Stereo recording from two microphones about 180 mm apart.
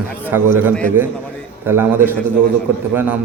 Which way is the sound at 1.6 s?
10° right (ahead or behind).